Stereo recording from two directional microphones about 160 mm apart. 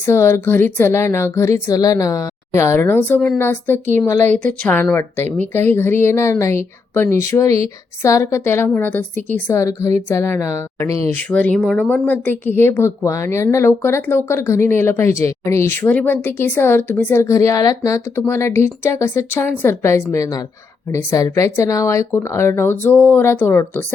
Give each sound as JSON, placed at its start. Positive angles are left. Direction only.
{"t": 0.0, "sound": "a woman's voice", "side_deg": 15}